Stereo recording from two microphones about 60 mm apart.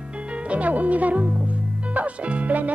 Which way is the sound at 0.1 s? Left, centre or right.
Centre.